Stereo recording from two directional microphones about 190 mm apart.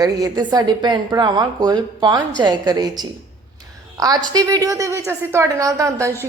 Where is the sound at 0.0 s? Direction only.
20° right (ahead or behind).